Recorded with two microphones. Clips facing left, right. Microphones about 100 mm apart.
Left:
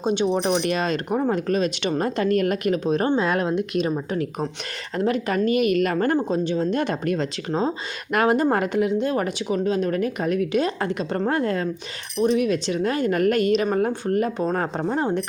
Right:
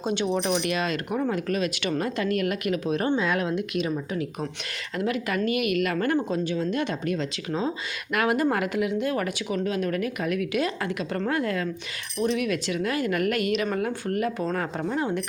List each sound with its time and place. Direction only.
0.0 s speech: 20° left (ahead or behind)
0.4 s a woman's voice: 35° left (ahead or behind)
2.0 s a woman's voice: 40° left (ahead or behind)
6.1 s a woman's voice: 25° left (ahead or behind)